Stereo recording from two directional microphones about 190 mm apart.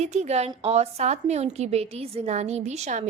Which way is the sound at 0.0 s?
35° right (ahead or behind).